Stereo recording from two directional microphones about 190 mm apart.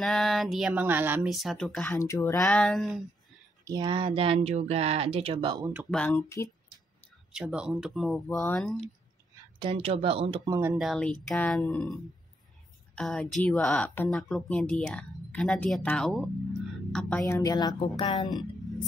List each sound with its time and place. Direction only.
0.0 s speech: centre (ahead or behind)
2.0 s speech: 15° left (ahead or behind)
2.4 s speech: 5° left (ahead or behind)
3.6 s speech: 20° right (ahead or behind)
5.9 s speech: 5° left (ahead or behind)
7.3 s speech: 5° right (ahead or behind)
9.6 s speech: 30° right (ahead or behind)
10.8 s speech: centre (ahead or behind)
17.2 s a woman's voice: 15° left (ahead or behind)